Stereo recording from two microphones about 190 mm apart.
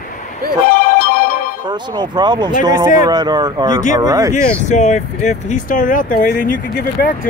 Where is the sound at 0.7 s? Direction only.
50° left (ahead or behind).